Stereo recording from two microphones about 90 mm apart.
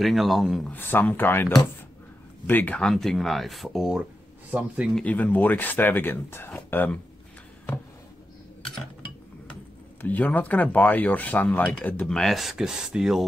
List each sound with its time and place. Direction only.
0.0 s speech: centre (ahead or behind)
0.7 s speech: 20° left (ahead or behind)
2.9 s speech: 5° left (ahead or behind); by 4.9 s 15° right (ahead or behind)
5.0 s speech: 15° left (ahead or behind)
10.0 s speech: 20° left (ahead or behind)
12.1 s speech: 5° left (ahead or behind)